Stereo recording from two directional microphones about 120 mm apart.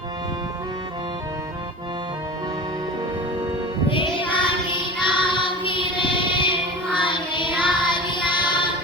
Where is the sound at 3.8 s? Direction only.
45° left (ahead or behind).